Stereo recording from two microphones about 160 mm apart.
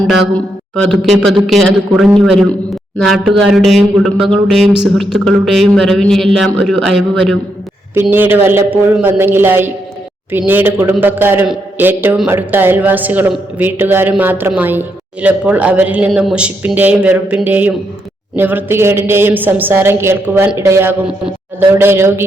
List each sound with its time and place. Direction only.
0.8 s speech: centre (ahead or behind)
8.1 s a woman's voice: 10° right (ahead or behind)